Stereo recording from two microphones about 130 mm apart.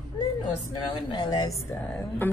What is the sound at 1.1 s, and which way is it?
Speech, 35° left (ahead or behind).